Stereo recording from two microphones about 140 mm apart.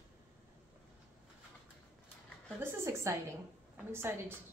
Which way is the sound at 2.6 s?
20° right (ahead or behind).